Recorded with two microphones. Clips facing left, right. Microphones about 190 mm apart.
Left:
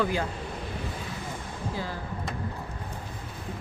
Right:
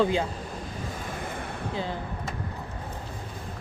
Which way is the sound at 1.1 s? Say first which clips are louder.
Right 3 dB; 60° right (ahead or behind).